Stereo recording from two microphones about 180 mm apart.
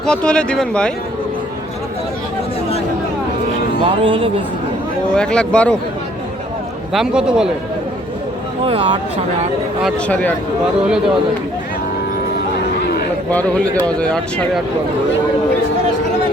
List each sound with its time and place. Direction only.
0.0 s speech: 5° left (ahead or behind)
3.8 s speech: 30° right (ahead or behind)
5.1 s speech: 5° left (ahead or behind)
6.9 s speech: 5° right (ahead or behind)
8.6 s speech: 30° right (ahead or behind)
10.1 s speech: 10° left (ahead or behind)
12.8 s a sound: 60° left (ahead or behind)
13.3 s speech: 10° left (ahead or behind)